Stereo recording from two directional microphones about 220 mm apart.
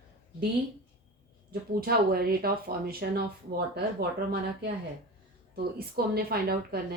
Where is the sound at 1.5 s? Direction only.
45° right (ahead or behind).